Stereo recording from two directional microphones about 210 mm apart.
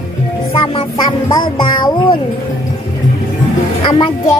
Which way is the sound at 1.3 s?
20° left (ahead or behind).